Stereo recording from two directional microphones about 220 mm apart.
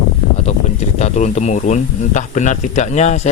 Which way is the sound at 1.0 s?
30° left (ahead or behind).